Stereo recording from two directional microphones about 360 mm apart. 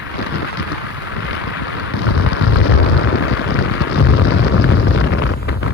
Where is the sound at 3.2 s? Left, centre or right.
Left.